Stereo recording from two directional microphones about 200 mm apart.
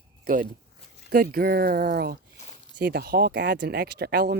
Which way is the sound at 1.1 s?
45° right (ahead or behind).